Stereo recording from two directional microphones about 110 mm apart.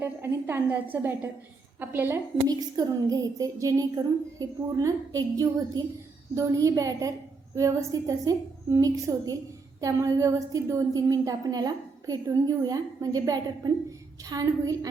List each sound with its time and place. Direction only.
0.0 s a woman's voice: 20° right (ahead or behind)
2.5 s a woman's voice: 35° right (ahead or behind)